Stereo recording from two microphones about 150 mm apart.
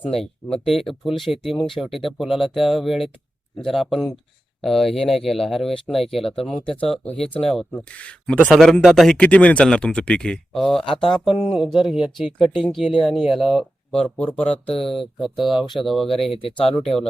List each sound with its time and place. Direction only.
0.9 s speech: centre (ahead or behind)
16.2 s speech: 40° left (ahead or behind)
16.8 s speech: centre (ahead or behind)